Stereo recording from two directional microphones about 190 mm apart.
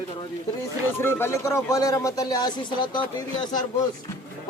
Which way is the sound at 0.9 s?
10° left (ahead or behind).